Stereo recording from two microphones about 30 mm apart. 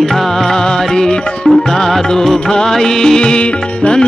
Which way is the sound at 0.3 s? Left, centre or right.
Centre.